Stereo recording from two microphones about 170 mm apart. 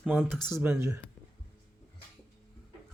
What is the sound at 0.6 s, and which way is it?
Speech, 10° right (ahead or behind).